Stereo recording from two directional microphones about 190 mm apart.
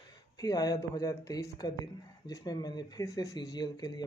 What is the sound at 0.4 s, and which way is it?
Speech, 20° left (ahead or behind).